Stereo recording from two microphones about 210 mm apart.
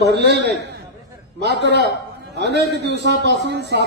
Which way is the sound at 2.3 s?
50° right (ahead or behind).